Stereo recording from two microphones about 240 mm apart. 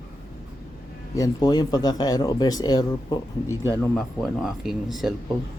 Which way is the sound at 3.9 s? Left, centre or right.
Centre.